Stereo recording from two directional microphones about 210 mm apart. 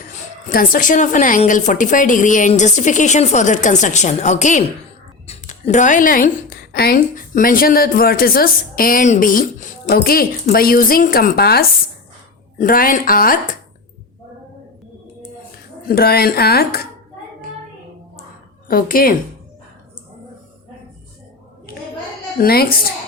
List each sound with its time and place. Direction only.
0.5 s a woman's voice: 40° left (ahead or behind)
15.9 s speech: 45° left (ahead or behind)
18.7 s speech: 45° left (ahead or behind)
22.4 s speech: 45° left (ahead or behind)